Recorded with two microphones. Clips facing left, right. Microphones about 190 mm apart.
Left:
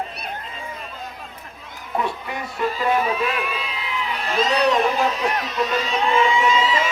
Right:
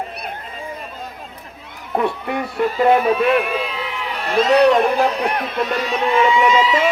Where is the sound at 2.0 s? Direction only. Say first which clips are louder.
Right 6 dB; 60° right (ahead or behind).